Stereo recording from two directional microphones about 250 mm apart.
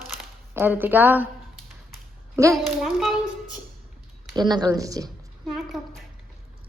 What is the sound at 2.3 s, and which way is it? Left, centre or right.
Speech, centre.